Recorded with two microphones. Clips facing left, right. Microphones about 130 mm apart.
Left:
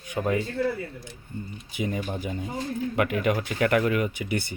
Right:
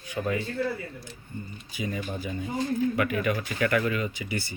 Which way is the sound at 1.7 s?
20° left (ahead or behind).